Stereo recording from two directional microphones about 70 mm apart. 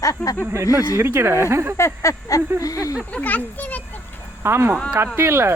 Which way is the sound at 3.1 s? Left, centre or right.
Left.